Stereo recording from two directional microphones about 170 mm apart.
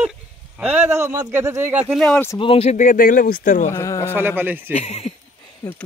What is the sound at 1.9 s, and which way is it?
Speech, 5° left (ahead or behind).